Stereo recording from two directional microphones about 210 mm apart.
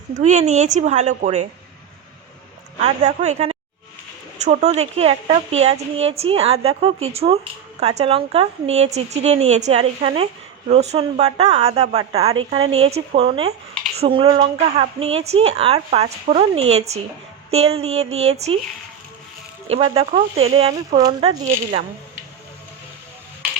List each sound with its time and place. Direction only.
0.2 s a woman's voice: 35° right (ahead or behind)
2.7 s a woman's voice: 30° right (ahead or behind)
19.6 s a woman's voice: 25° right (ahead or behind)